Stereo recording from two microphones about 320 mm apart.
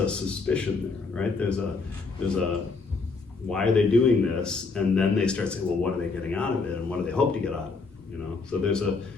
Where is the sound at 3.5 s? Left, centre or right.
Centre.